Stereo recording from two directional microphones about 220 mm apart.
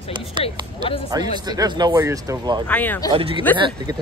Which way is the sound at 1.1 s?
15° right (ahead or behind).